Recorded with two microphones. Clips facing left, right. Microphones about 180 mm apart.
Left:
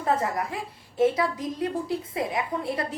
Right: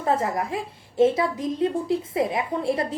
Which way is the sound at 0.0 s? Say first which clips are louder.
Right 2 dB; 25° right (ahead or behind).